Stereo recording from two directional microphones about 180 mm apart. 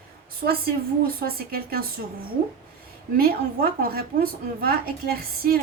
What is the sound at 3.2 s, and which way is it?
A woman's voice, 55° right (ahead or behind).